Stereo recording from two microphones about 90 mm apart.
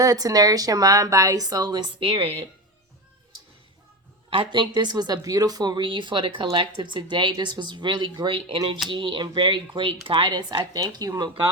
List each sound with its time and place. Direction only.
0.0 s a woman's voice: 45° right (ahead or behind)
2.0 s speech: 75° right (ahead or behind)
4.3 s speech: 75° right (ahead or behind)
4.7 s speech: 50° right (ahead or behind)
10.8 s a woman's voice: 45° right (ahead or behind)